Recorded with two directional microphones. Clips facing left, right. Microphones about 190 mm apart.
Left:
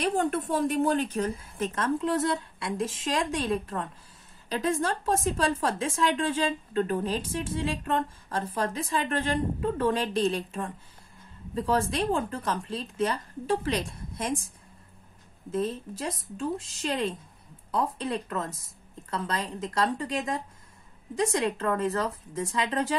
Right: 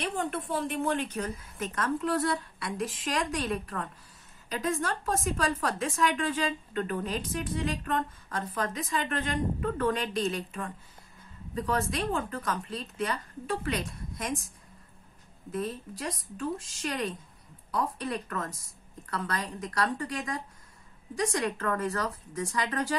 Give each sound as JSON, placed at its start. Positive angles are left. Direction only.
{"t": 0.0, "sound": "a woman's voice", "side_deg": 40}
{"t": 15.5, "sound": "a woman's voice", "side_deg": 25}